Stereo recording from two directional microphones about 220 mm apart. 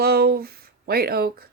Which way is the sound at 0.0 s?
45° right (ahead or behind).